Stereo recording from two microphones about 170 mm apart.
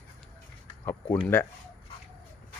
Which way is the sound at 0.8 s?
15° left (ahead or behind).